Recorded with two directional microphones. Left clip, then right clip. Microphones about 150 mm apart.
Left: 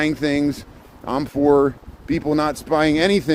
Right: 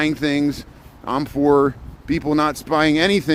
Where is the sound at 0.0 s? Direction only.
50° right (ahead or behind).